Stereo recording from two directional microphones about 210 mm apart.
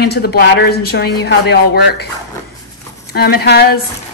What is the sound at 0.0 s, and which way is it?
Speech, 50° left (ahead or behind).